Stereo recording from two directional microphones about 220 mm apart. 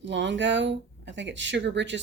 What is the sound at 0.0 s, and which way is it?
A woman's voice, 55° right (ahead or behind).